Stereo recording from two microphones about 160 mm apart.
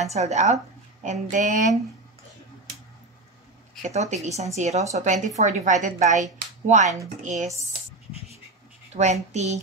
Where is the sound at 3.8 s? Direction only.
45° right (ahead or behind).